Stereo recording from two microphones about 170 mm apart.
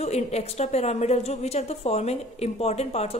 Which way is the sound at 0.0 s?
40° left (ahead or behind).